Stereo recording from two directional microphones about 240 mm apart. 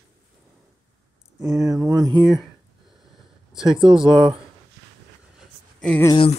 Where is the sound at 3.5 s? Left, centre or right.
Centre.